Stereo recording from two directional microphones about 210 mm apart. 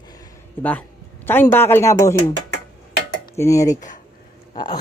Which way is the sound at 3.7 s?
35° left (ahead or behind).